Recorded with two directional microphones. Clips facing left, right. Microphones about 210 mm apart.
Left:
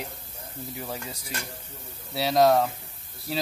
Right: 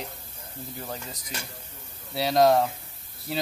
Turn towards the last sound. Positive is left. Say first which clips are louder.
# even
turn(degrees=0)  # may be behind; listen again after turning